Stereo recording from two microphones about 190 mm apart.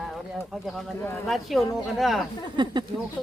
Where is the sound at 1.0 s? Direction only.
10° left (ahead or behind).